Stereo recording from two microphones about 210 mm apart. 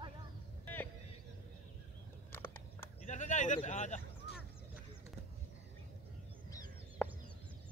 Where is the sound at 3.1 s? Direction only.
35° left (ahead or behind).